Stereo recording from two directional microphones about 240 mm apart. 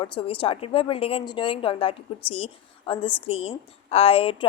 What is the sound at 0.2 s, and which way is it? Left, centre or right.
A woman's voice, left.